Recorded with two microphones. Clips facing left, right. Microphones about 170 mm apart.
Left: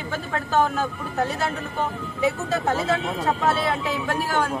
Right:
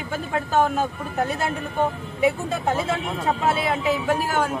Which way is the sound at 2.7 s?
10° right (ahead or behind).